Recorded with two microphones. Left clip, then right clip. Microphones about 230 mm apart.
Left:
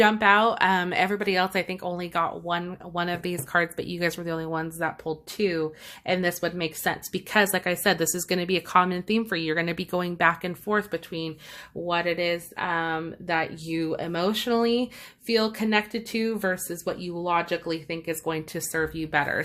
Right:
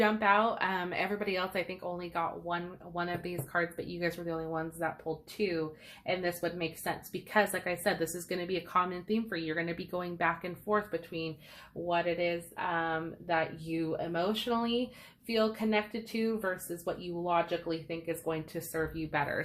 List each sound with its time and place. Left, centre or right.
0.0 s speech: left